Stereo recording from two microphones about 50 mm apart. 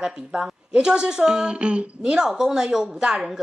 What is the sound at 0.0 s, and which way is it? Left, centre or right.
A woman's voice, centre.